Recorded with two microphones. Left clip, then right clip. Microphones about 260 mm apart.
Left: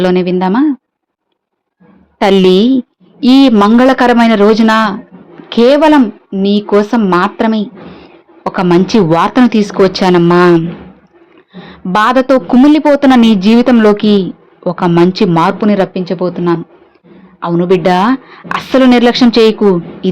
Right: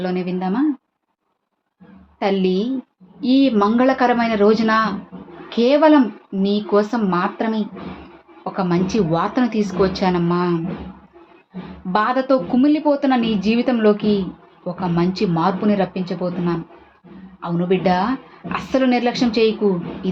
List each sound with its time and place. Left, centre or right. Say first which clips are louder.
0.0 s a woman's voice: left 12 dB; left
2.1 s a woman's voice: left 12 dB; left
11.9 s a woman's voice: left 9 dB; left